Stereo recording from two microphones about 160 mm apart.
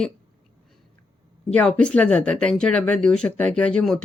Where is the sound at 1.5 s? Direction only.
5° left (ahead or behind).